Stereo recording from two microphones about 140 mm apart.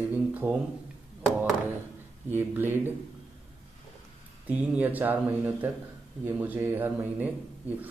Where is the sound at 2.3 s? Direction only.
15° right (ahead or behind).